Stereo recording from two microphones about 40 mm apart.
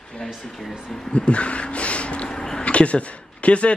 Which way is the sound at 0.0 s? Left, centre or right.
Centre.